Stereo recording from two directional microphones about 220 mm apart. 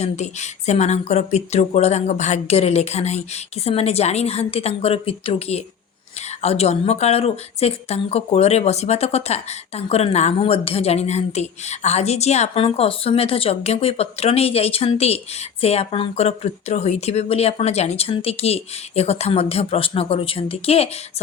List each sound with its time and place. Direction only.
0.0 s a woman's voice: 30° left (ahead or behind)